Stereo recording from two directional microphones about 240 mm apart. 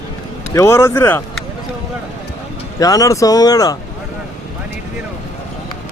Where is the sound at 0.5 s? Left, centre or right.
Centre.